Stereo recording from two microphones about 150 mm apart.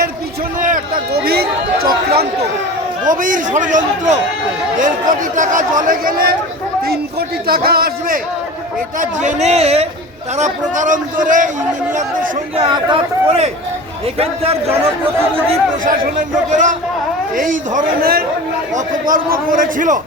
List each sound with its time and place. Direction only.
0.6 s run: 65° right (ahead or behind); by 2.5 s 90° right
3.0 s a man's voice: 60° right (ahead or behind)
6.8 s a man's voice: 90° right
9.0 s a man's voice: 50° right (ahead or behind)
12.5 s speech: 35° right (ahead or behind)
16.5 s a man's voice: 55° right (ahead or behind)